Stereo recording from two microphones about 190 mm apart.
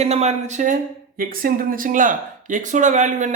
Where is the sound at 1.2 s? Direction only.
50° right (ahead or behind).